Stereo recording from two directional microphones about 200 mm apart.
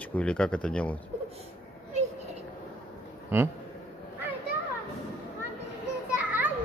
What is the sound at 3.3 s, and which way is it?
Speech, 10° right (ahead or behind).